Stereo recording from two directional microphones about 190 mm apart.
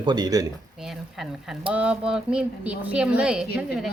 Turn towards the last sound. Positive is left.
turn(degrees=-5)  # may be behind; listen again after turning